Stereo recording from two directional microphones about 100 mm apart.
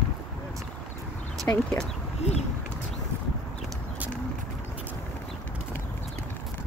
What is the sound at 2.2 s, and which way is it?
Speech, 90° left.